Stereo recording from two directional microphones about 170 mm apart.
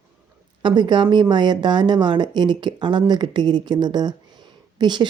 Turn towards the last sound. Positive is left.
turn(degrees=-25)  # may be behind; listen again after turning